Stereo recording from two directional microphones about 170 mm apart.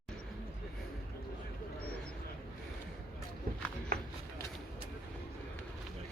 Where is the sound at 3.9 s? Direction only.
55° right (ahead or behind).